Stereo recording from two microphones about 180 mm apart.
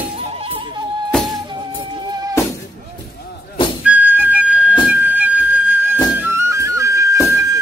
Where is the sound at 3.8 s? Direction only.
10° right (ahead or behind).